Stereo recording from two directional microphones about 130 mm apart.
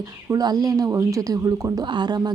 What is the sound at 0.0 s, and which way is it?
Speech, 30° right (ahead or behind).